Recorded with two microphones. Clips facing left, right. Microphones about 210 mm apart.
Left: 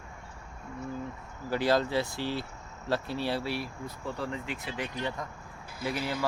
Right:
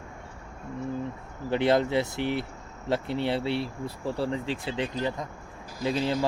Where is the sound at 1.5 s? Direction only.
25° right (ahead or behind).